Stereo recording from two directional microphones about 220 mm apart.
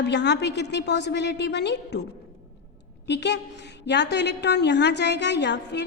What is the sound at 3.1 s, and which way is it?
A woman's voice, 50° left (ahead or behind).